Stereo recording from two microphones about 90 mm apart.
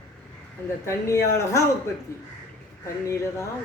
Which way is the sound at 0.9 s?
35° left (ahead or behind).